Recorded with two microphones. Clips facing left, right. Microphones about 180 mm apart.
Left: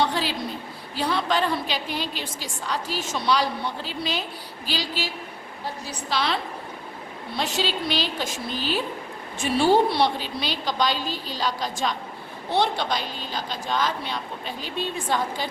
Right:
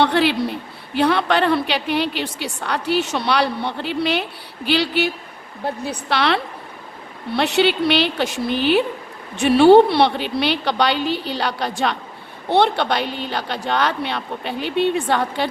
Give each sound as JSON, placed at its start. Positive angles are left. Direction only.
{"t": 0.0, "sound": "a woman's voice", "side_deg": -65}